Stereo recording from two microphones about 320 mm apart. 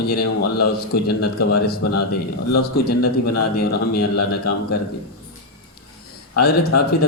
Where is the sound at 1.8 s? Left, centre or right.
Left.